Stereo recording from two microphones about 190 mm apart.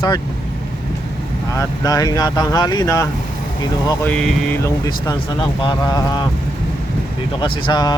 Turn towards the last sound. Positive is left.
turn(degrees=20)  # may be behind; listen again after turning